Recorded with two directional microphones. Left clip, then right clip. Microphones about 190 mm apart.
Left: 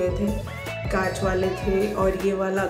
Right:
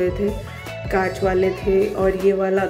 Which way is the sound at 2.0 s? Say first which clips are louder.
Right 5 dB; 10° right (ahead or behind).